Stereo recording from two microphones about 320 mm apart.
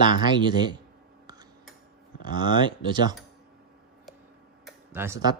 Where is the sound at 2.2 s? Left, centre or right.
Centre.